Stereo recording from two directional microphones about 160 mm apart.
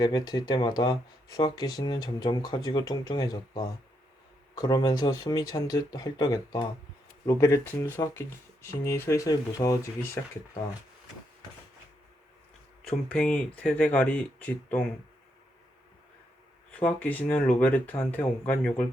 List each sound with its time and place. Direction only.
0.0 s speech: 25° left (ahead or behind)
12.8 s speech: 5° left (ahead or behind)
16.8 s speech: 10° left (ahead or behind)